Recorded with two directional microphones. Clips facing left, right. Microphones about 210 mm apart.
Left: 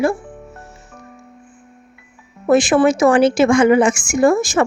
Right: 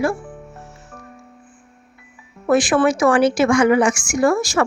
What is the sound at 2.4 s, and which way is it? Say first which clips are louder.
A woman's voice: left 3 dB; 25° left (ahead or behind).